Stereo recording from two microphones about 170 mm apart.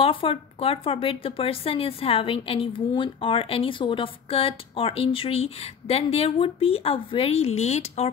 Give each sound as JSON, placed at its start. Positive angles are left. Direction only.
{"t": 0.0, "sound": "a woman's voice", "side_deg": 30}